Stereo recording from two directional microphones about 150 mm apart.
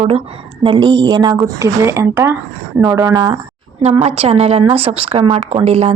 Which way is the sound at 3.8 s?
45° right (ahead or behind).